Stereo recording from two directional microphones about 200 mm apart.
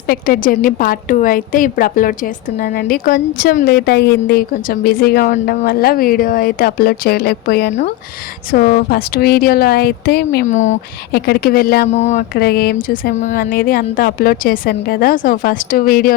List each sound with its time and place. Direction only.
0.1 s a woman's voice: 45° left (ahead or behind)
10.4 s speech: 35° left (ahead or behind)
11.1 s a woman's voice: 50° left (ahead or behind)
11.9 s speech: 35° left (ahead or behind)
12.3 s a woman's voice: 50° left (ahead or behind)